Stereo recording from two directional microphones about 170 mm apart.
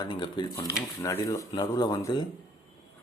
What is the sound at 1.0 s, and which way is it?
Speech, 15° left (ahead or behind).